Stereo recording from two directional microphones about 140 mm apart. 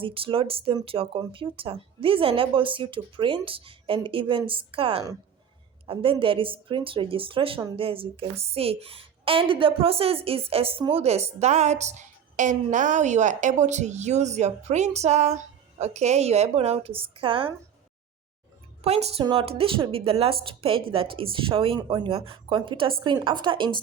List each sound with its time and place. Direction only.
0.0 s a woman's voice: 40° right (ahead or behind)
18.8 s a woman's voice: 50° right (ahead or behind)
19.2 s a woman's voice: 35° right (ahead or behind)